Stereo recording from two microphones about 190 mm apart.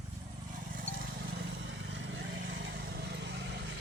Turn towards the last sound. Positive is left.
turn(degrees=-60)  # may be behind; listen again after turning